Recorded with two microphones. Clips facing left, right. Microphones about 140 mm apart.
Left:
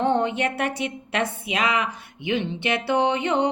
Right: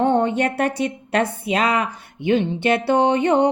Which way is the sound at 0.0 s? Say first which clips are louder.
Right 4 dB; 45° right (ahead or behind).